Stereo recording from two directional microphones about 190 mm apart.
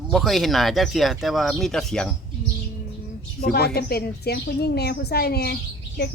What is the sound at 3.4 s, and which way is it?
Speech, 55° left (ahead or behind).